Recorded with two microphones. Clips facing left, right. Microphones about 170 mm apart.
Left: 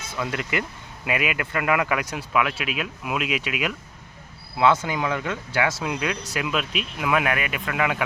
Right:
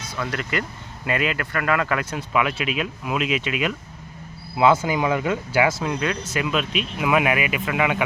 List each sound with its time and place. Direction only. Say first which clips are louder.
0.2 s speech: even; 15° left (ahead or behind)
4.5 s speech: right 2 dB; 5° right (ahead or behind)
5.8 s speech: right 2 dB; 5° left (ahead or behind)